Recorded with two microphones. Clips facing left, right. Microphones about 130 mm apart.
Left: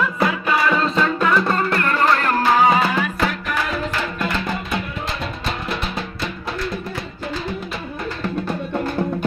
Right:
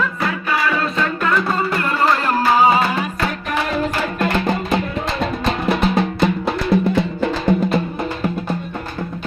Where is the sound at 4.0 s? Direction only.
50° right (ahead or behind).